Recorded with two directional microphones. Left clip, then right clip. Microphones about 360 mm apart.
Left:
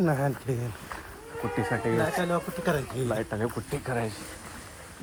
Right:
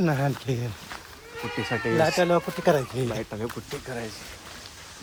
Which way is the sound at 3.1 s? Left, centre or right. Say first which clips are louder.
Left 2 dB; centre.